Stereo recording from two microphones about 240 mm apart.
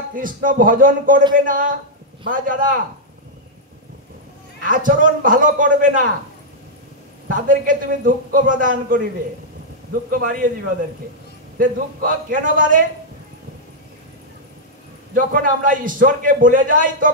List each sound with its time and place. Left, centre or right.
0.1 s a man's voice: right
4.6 s a man's voice: right
7.2 s a man's voice: right
10.2 s a man's voice: right
11.5 s a man's voice: right
15.1 s a man's voice: right